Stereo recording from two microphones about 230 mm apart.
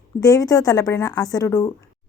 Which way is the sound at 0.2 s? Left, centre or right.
Centre.